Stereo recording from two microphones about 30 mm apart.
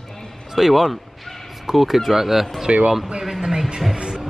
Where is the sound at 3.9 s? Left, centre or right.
Centre.